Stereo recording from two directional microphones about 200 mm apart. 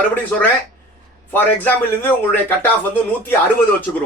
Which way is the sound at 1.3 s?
10° left (ahead or behind).